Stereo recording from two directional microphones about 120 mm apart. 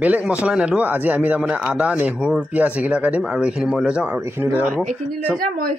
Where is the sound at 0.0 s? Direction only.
10° right (ahead or behind).